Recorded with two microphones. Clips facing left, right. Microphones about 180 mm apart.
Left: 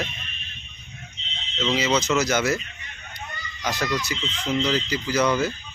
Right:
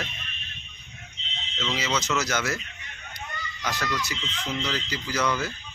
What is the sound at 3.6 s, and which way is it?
Speech, 15° left (ahead or behind).